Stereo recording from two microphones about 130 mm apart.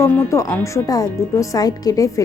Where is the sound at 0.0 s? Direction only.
20° left (ahead or behind).